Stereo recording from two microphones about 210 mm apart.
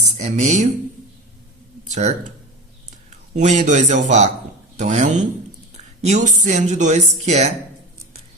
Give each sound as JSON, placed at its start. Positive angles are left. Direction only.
{"t": 0.2, "sound": "speech", "side_deg": -30}
{"t": 1.9, "sound": "speech", "side_deg": -35}
{"t": 3.3, "sound": "speech", "side_deg": -35}